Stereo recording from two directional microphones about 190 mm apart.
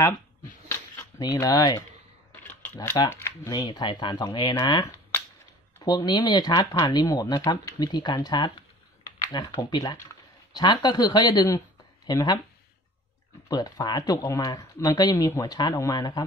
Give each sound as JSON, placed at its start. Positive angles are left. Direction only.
{"t": 0.7, "sound": "a sound", "side_deg": 15}
{"t": 2.4, "sound": "camera", "side_deg": 10}
{"t": 3.0, "sound": "speech", "side_deg": 15}
{"t": 13.5, "sound": "speech", "side_deg": 20}